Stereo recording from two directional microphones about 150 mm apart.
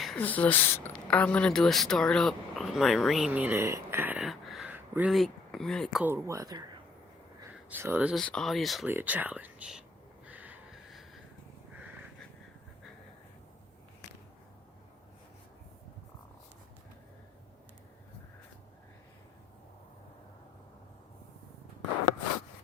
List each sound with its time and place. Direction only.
0.2 s speech: 10° left (ahead or behind); by 4.2 s 15° right (ahead or behind)
4.2 s a sound: centre (ahead or behind)
4.7 s a sound: 10° right (ahead or behind)
5.1 s speech: centre (ahead or behind)
6.0 s speech: 10° right (ahead or behind)
7.7 s speech: 15° right (ahead or behind)
8.1 s speech: 5° left (ahead or behind)
8.9 s speech: 10° right (ahead or behind)
10.2 s gasp: 10° right (ahead or behind)